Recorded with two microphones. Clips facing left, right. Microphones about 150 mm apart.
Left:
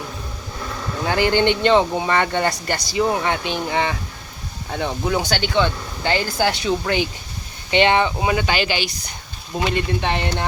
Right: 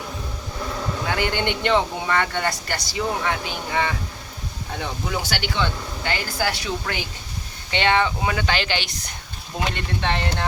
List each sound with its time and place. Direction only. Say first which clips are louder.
1.0 s speech: left 7 dB; 30° left (ahead or behind)